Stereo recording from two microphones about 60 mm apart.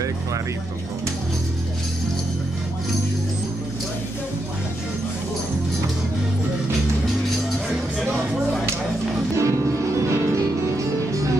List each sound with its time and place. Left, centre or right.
9.4 s music: right